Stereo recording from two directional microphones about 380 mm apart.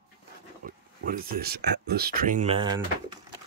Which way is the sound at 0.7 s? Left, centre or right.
Right.